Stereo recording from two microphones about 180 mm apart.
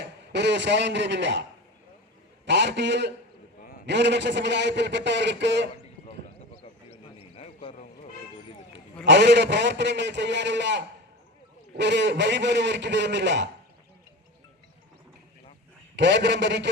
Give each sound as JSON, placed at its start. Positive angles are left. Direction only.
{"t": 0.3, "sound": "a man's voice", "side_deg": -80}
{"t": 2.5, "sound": "a man's voice", "side_deg": -75}
{"t": 7.2, "sound": "a sound", "side_deg": 30}
{"t": 9.0, "sound": "a man's voice", "side_deg": -75}
{"t": 16.0, "sound": "a man's voice", "side_deg": -75}